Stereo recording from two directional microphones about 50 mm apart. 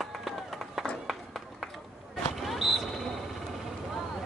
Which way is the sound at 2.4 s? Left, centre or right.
Centre.